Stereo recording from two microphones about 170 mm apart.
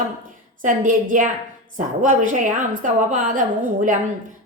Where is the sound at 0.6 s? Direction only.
50° right (ahead or behind).